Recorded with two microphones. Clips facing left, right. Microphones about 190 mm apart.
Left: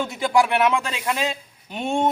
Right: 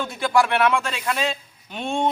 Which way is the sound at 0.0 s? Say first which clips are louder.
Left 1 dB; 20° left (ahead or behind).